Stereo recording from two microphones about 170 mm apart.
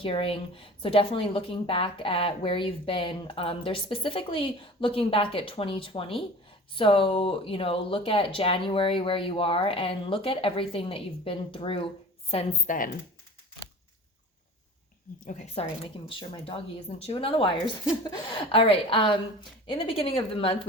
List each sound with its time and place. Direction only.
0.0 s speech: 35° left (ahead or behind)
15.3 s a woman's voice: 45° left (ahead or behind)
16.0 s speech: 30° left (ahead or behind)